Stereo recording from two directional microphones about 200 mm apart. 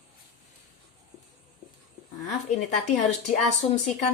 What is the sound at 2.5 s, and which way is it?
A woman's voice, 35° left (ahead or behind).